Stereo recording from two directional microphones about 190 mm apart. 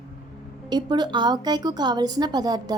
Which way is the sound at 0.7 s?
20° right (ahead or behind).